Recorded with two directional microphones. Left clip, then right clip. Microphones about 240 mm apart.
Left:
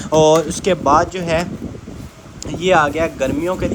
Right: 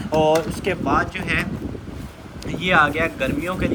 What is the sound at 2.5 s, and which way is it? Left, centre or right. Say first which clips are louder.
Speech: left 3 dB; centre.